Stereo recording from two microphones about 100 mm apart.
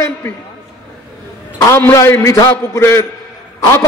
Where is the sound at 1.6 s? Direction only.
25° left (ahead or behind).